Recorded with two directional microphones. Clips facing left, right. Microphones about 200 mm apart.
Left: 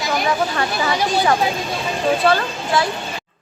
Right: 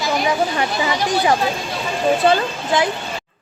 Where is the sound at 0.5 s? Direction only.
15° right (ahead or behind).